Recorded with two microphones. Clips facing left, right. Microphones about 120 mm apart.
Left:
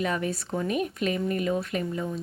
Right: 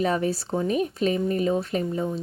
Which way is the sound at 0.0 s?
35° right (ahead or behind).